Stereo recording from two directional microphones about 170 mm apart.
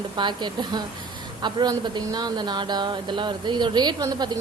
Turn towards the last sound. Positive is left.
turn(degrees=-25)  # may be behind; listen again after turning